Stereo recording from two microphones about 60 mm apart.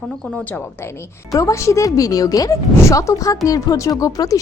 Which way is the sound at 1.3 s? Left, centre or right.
Left.